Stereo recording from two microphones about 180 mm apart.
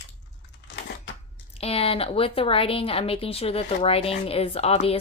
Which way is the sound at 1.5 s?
35° left (ahead or behind).